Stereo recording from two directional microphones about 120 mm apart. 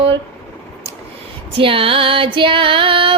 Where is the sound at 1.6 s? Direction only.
50° right (ahead or behind).